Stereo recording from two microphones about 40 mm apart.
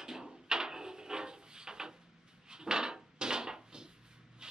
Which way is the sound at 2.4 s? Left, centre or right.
Centre.